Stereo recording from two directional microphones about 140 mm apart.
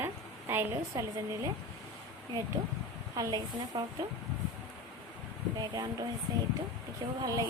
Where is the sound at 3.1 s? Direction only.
25° right (ahead or behind).